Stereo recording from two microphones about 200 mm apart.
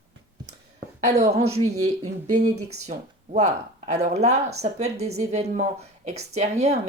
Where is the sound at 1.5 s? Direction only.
35° right (ahead or behind).